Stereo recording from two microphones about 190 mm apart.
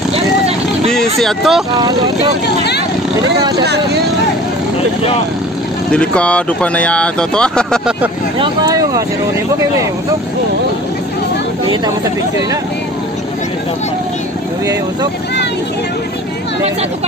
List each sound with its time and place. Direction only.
0.9 s speech: centre (ahead or behind)
2.4 s speech: 60° left (ahead or behind)
3.6 s speech: 60° right (ahead or behind)
5.9 s speech: 5° left (ahead or behind)
8.4 s speech: 20° right (ahead or behind)